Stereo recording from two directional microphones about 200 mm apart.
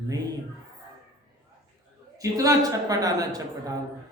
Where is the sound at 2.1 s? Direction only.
15° right (ahead or behind).